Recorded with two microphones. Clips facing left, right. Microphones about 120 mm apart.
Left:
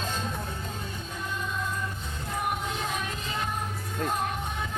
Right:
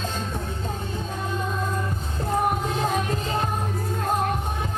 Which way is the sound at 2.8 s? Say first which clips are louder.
Right 8 dB; 40° right (ahead or behind).